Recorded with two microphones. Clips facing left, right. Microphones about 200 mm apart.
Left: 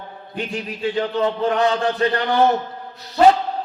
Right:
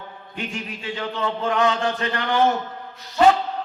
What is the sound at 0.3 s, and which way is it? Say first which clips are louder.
Speech: left 4 dB; 35° left (ahead or behind).